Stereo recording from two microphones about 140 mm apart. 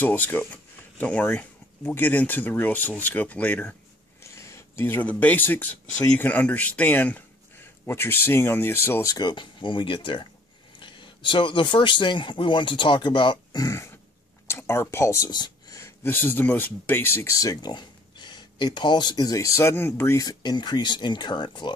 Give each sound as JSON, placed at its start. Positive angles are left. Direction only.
{"t": 0.0, "sound": "speech", "side_deg": 15}